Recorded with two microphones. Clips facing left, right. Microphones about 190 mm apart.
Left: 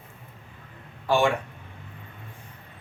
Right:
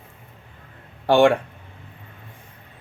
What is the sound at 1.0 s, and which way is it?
Speech, 65° right (ahead or behind).